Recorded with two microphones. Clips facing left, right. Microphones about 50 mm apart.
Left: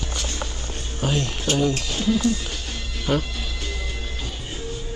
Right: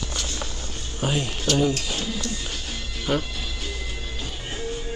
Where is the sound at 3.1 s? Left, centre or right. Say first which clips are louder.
Left 2 dB; centre.